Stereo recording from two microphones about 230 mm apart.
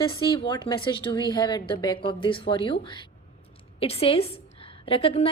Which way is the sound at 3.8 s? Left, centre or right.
Left.